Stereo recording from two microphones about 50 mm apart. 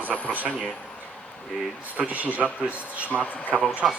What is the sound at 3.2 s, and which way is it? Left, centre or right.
Speech, left.